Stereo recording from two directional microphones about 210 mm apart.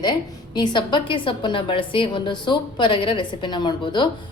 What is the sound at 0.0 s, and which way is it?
A woman's voice, 20° left (ahead or behind).